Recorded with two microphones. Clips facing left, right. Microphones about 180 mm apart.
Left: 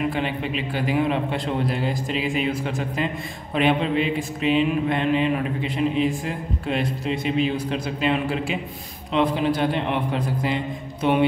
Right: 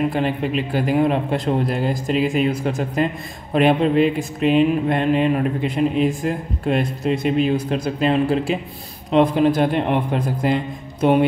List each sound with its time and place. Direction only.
0.1 s speech: 45° right (ahead or behind)